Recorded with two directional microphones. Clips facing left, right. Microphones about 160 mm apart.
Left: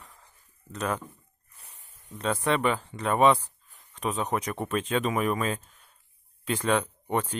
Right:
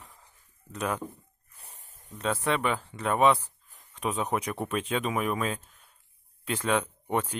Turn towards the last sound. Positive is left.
turn(degrees=-5)  # may be behind; listen again after turning